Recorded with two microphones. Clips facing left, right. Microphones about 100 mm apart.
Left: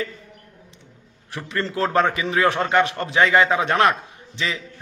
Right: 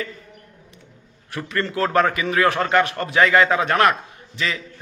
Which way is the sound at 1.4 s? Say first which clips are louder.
Right 1 dB; 25° left (ahead or behind).